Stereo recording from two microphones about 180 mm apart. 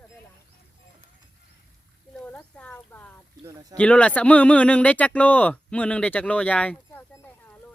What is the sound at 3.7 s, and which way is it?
Speech, 5° left (ahead or behind).